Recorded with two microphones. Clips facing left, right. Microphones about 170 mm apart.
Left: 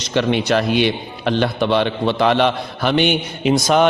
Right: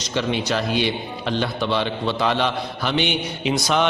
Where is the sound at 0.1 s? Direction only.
65° left (ahead or behind).